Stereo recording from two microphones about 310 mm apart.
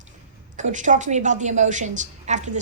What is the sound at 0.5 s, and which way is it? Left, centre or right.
A woman's voice, right.